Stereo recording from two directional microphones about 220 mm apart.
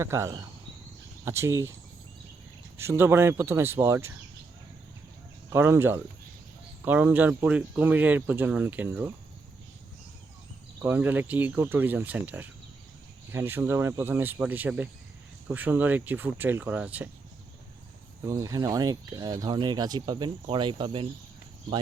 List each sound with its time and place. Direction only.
0.0 s speech: 10° right (ahead or behind)
2.7 s speech: 10° right (ahead or behind)
5.5 s speech: 10° right (ahead or behind)
10.8 s speech: 10° right (ahead or behind)
18.3 s speech: 15° right (ahead or behind)